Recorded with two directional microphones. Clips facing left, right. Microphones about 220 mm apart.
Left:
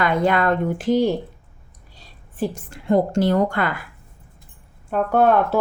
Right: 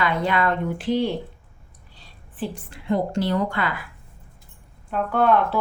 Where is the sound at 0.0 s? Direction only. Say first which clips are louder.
Left 4 dB; 50° left (ahead or behind).